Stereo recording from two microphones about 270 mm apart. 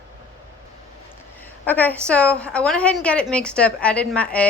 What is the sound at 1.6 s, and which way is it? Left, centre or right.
A woman's voice, centre.